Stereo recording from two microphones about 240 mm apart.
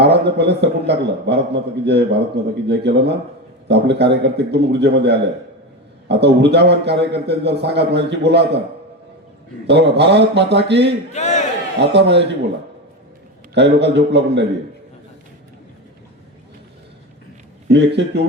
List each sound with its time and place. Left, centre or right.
0.0 s a man's voice: right
9.6 s a man's voice: right
11.1 s crowd: left
11.8 s a man's voice: right
13.5 s a man's voice: right
17.7 s a man's voice: right